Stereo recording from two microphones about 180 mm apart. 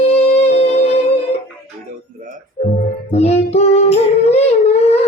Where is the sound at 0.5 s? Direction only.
35° left (ahead or behind).